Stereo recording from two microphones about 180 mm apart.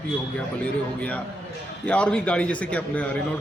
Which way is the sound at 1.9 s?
5° left (ahead or behind).